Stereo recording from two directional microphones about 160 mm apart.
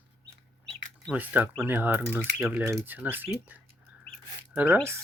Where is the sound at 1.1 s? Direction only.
10° right (ahead or behind).